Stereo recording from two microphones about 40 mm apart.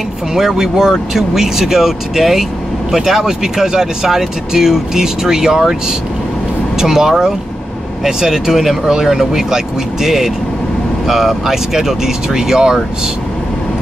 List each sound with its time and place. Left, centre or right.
0.3 s speech: centre